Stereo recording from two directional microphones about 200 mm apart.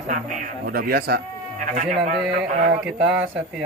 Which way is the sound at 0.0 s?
40° right (ahead or behind).